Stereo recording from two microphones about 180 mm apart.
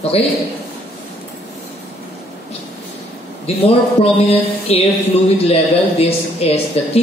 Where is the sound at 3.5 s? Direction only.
35° left (ahead or behind).